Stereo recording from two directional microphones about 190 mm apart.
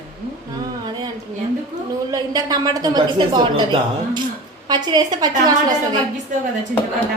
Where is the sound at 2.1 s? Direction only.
20° right (ahead or behind).